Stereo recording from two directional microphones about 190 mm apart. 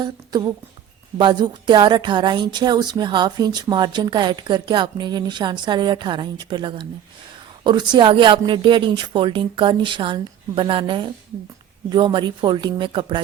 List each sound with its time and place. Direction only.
0.0 s speech: 20° right (ahead or behind)